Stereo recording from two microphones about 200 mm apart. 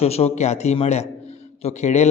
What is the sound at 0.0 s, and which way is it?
A man's voice, 30° left (ahead or behind).